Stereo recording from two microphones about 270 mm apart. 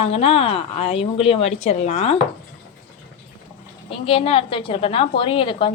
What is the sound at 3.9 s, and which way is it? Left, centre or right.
A woman's voice, left.